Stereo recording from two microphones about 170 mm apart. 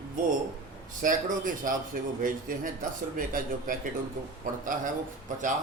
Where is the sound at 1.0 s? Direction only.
50° right (ahead or behind).